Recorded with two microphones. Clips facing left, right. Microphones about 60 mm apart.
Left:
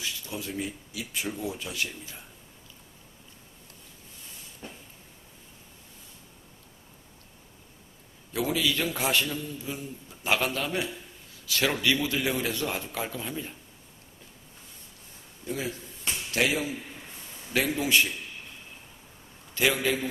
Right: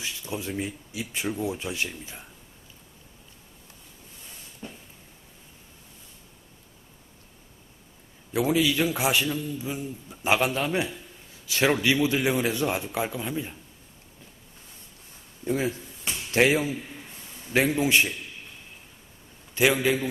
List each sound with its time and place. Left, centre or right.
0.0 s speech: right
8.3 s a man's voice: right
15.4 s speech: right
19.5 s a man's voice: centre